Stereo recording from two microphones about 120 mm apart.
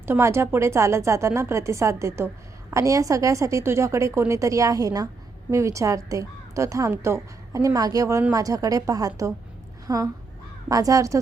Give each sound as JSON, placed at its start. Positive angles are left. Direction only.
{"t": 0.0, "sound": "a woman's voice", "side_deg": -20}